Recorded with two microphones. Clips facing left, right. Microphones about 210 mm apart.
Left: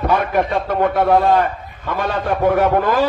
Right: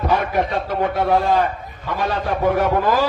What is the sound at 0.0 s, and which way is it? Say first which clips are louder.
A man's voice: left 2 dB; 55° left (ahead or behind).